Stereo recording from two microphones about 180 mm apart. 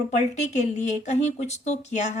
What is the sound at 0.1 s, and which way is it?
A woman's voice, 40° left (ahead or behind).